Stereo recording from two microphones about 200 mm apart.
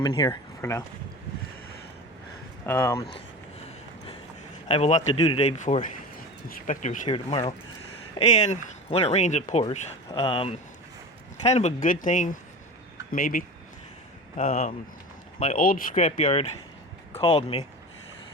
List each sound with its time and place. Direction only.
0.0 s speech: 20° left (ahead or behind)
2.6 s speech: 10° left (ahead or behind)
4.7 s speech: 30° left (ahead or behind)
14.3 s speech: 35° left (ahead or behind)
15.5 s speech: 45° left (ahead or behind)